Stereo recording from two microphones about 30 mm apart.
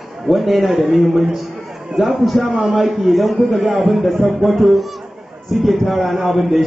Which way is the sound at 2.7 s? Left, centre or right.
Centre.